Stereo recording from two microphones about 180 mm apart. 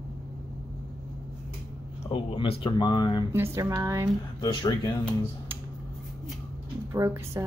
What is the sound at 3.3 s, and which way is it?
Speech, 15° right (ahead or behind).